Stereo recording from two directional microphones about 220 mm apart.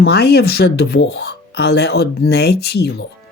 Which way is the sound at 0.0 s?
45° left (ahead or behind).